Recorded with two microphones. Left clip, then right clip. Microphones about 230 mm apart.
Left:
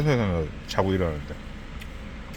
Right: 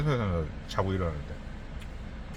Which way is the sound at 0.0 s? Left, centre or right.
Left.